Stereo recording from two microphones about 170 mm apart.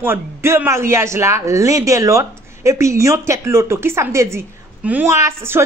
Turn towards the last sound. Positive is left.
turn(degrees=-15)  # may be behind; listen again after turning